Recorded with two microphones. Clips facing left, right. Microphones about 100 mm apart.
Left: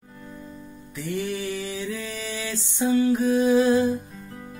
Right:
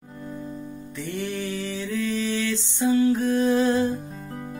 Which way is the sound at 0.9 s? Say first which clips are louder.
Left 2 dB; centre (ahead or behind).